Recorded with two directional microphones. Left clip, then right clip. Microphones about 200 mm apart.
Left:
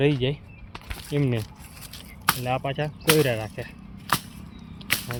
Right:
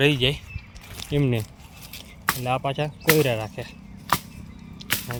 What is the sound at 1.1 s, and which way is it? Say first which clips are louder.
Speech: right 2 dB; 25° right (ahead or behind).